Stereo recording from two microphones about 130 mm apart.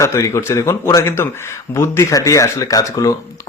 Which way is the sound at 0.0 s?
20° left (ahead or behind).